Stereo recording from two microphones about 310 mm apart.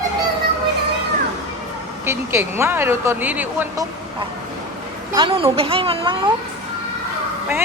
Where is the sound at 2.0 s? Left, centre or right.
Centre.